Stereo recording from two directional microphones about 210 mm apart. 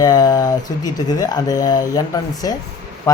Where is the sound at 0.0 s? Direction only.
20° left (ahead or behind).